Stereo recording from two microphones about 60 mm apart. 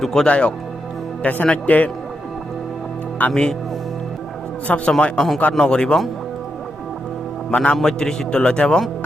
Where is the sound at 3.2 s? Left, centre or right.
Left.